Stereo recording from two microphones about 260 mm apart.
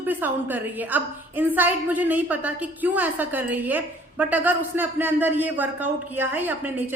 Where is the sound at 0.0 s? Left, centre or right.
Centre.